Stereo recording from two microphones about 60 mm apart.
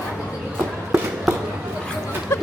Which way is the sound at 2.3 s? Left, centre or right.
Left.